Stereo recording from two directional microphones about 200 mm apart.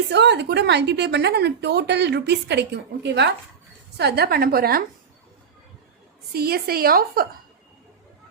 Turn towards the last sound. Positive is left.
turn(degrees=-50)  # may be behind; listen again after turning